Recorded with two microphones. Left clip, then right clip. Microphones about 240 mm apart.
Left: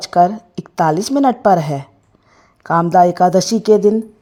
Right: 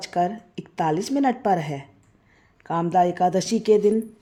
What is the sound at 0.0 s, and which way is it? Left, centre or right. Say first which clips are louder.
A woman's voice: left 11 dB; left.